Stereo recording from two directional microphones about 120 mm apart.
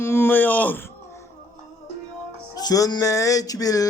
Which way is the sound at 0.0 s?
20° left (ahead or behind).